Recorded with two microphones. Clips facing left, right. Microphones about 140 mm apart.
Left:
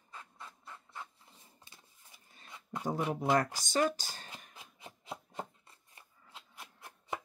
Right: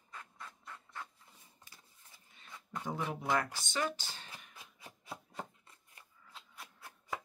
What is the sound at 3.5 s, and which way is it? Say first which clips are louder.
Speech: left 6 dB; 40° left (ahead or behind).